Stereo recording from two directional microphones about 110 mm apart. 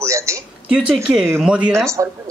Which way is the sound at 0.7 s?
5° right (ahead or behind).